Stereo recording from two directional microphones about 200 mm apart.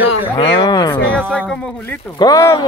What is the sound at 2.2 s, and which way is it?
Speech, 15° left (ahead or behind).